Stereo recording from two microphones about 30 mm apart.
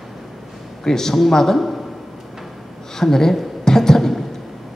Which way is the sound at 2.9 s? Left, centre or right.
Centre.